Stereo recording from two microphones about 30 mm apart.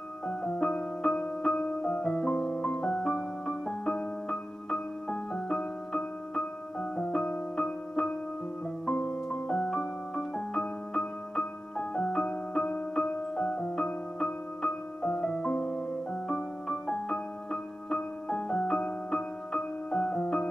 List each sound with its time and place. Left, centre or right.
0.3 s music: left
1.7 s music: left
3.1 s music: centre; by 9.4 s left
9.5 s music: centre
13.4 s music: left
14.2 s music: centre
15.0 s music: left
16.3 s music: centre